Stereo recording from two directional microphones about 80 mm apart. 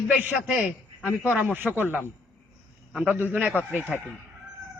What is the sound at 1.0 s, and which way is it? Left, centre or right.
Speech, left.